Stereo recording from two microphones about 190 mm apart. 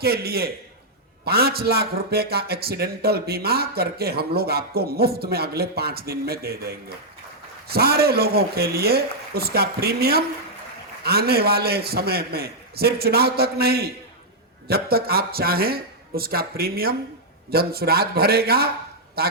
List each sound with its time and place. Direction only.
0.0 s a man's voice: 55° right (ahead or behind)